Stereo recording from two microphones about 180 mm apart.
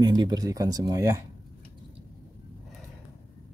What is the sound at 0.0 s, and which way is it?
Speech, 20° right (ahead or behind).